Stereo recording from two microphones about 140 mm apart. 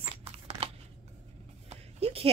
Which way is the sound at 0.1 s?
45° right (ahead or behind).